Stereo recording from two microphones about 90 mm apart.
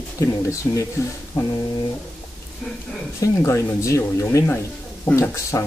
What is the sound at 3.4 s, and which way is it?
Speech, 30° left (ahead or behind).